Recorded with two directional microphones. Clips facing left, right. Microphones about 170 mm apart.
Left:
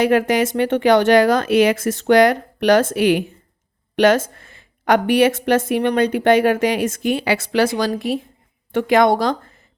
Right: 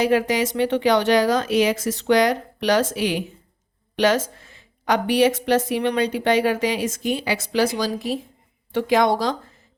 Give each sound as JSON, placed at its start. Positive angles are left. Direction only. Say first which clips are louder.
{"t": 0.0, "sound": "a woman's voice", "louder": "left 3 dB", "side_deg": 55}